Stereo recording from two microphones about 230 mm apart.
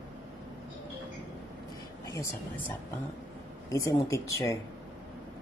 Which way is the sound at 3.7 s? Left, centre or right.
Centre.